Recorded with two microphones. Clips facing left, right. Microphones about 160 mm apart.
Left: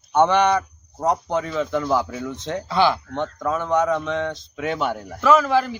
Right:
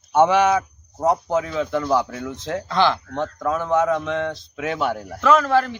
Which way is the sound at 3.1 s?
Centre (ahead or behind).